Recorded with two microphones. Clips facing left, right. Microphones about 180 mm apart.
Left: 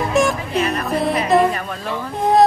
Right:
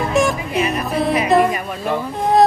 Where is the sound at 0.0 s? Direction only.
Centre (ahead or behind).